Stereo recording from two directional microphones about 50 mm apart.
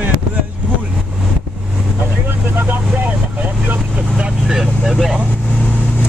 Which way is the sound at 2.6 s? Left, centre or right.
Right.